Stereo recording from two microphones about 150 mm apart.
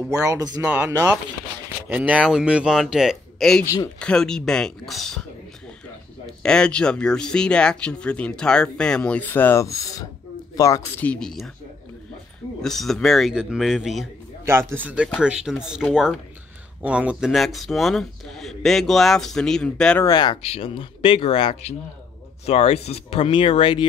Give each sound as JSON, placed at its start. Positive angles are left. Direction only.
{"t": 0.2, "sound": "speech", "side_deg": -20}
{"t": 6.4, "sound": "speech", "side_deg": 5}
{"t": 10.5, "sound": "a sound", "side_deg": 25}
{"t": 11.0, "sound": "speech", "side_deg": 5}
{"t": 12.6, "sound": "speech", "side_deg": 0}
{"t": 14.4, "sound": "speech", "side_deg": -15}
{"t": 20.0, "sound": "speech", "side_deg": 30}
{"t": 20.4, "sound": "speech", "side_deg": 40}